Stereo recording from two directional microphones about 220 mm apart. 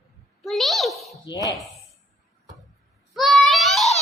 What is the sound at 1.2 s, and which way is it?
Speech, 15° left (ahead or behind).